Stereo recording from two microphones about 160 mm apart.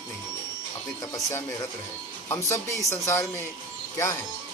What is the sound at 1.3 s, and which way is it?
Speech, 20° left (ahead or behind).